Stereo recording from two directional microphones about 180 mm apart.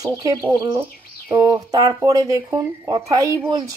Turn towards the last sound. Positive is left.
turn(degrees=-20)  # may be behind; listen again after turning